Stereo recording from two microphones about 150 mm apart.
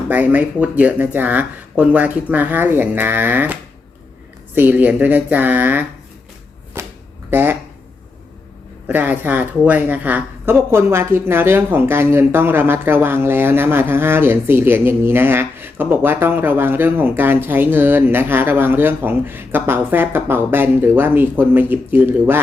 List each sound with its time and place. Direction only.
0.1 s a woman's voice: 10° right (ahead or behind)
6.8 s shuffling cards: 20° right (ahead or behind)
7.3 s speech: 15° right (ahead or behind)
8.9 s a woman's voice: 10° right (ahead or behind)